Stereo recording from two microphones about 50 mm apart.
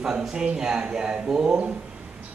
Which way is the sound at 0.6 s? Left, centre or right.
Centre.